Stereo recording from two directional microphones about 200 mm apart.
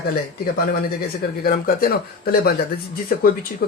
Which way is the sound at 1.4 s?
45° left (ahead or behind).